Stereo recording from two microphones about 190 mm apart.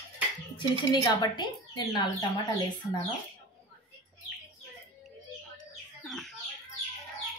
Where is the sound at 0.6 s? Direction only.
20° left (ahead or behind).